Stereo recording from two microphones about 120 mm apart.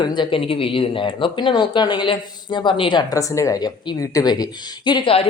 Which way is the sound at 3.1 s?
25° left (ahead or behind).